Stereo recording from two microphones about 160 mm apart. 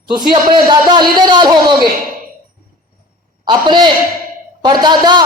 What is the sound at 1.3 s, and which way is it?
Speech, 30° right (ahead or behind).